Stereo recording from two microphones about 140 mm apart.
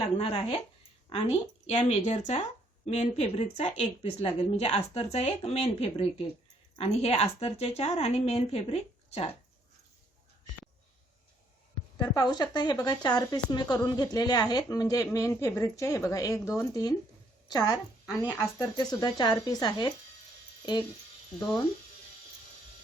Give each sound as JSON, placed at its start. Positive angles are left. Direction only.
{"t": 0.2, "sound": "a woman's voice", "side_deg": 45}
{"t": 2.0, "sound": "a woman's voice", "side_deg": 55}
{"t": 11.9, "sound": "a woman's voice", "side_deg": 30}
{"t": 18.0, "sound": "speech", "side_deg": -10}
{"t": 18.6, "sound": "a woman's voice", "side_deg": 30}